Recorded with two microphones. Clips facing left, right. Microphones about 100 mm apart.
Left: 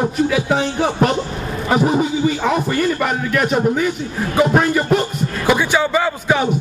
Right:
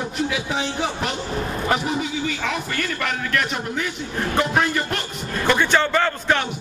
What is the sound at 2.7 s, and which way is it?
A man's voice, 10° left (ahead or behind).